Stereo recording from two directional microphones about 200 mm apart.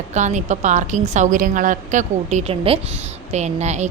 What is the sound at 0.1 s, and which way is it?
A woman's voice, 35° right (ahead or behind).